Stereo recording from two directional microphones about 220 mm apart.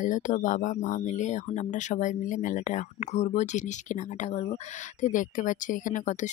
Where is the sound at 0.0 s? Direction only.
35° left (ahead or behind).